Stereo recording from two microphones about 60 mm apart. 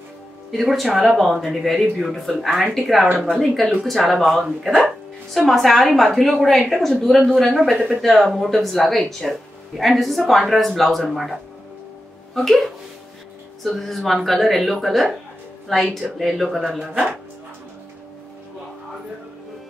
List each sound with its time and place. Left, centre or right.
0.5 s a woman's voice: centre
3.1 s speech: centre
3.3 s a woman's voice: centre
12.4 s a woman's voice: centre
16.7 s speech: centre